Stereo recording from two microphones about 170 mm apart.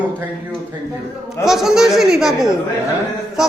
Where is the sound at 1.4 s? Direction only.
Centre (ahead or behind).